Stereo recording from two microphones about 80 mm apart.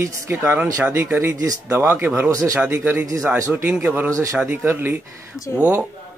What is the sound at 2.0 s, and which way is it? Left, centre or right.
Speech, right.